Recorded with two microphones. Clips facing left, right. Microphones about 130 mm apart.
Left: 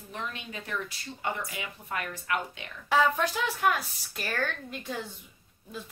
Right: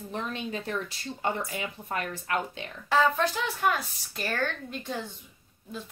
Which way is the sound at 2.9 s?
10° left (ahead or behind).